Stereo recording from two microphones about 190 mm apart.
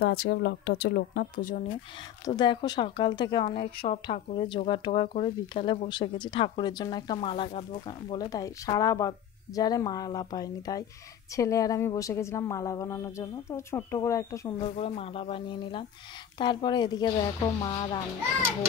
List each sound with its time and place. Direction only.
0.0 s speech: 55° left (ahead or behind)
2.2 s speech: 20° left (ahead or behind)
8.1 s a woman's voice: 20° left (ahead or behind)
14.8 s speech: 30° left (ahead or behind)